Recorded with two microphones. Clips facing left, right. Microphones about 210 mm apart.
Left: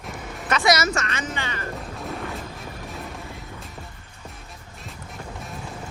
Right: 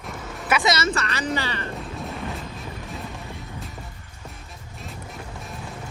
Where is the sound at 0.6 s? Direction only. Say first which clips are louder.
Left 2 dB; 30° right (ahead or behind).